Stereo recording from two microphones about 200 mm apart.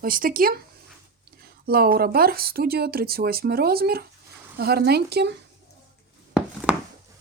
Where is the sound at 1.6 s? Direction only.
50° right (ahead or behind).